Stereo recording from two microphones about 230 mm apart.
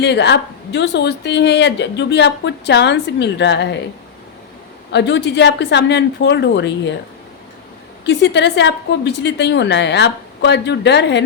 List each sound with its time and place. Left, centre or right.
0.0 s a woman's voice: left
4.9 s a woman's voice: left
8.0 s a woman's voice: left